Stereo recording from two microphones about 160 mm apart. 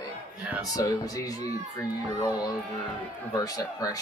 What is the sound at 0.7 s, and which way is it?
A man's voice, 20° left (ahead or behind).